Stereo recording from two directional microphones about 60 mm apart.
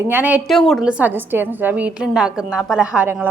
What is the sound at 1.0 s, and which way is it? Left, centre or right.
Speech, right.